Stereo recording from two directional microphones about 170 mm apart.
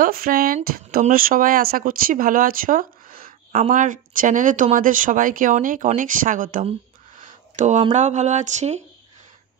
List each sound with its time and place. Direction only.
0.0 s speech: 55° right (ahead or behind)
7.2 s a sound: 45° right (ahead or behind)
7.9 s speech: 45° right (ahead or behind)